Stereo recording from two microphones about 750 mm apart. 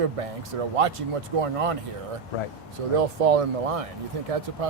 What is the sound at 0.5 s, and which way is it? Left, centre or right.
Speech, right.